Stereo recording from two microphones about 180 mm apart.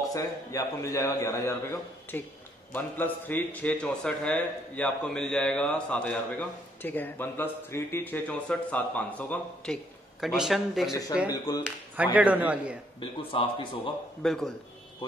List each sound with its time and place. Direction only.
0.1 s a man's voice: 20° left (ahead or behind)
10.2 s speech: centre (ahead or behind)
12.0 s a man's voice: 10° right (ahead or behind)
13.0 s speech: 30° left (ahead or behind)
14.2 s speech: 5° left (ahead or behind)